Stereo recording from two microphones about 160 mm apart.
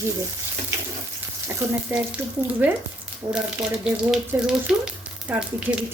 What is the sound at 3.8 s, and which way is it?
Speech, 5° right (ahead or behind).